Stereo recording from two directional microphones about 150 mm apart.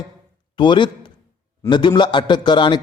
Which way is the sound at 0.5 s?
30° left (ahead or behind).